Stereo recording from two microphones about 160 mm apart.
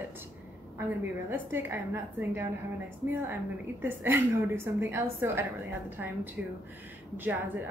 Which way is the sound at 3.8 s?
15° right (ahead or behind).